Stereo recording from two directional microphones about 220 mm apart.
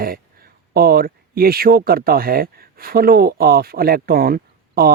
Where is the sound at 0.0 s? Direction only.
40° right (ahead or behind).